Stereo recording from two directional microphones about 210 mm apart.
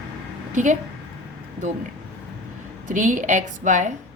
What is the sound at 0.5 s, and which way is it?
Speech, 35° right (ahead or behind).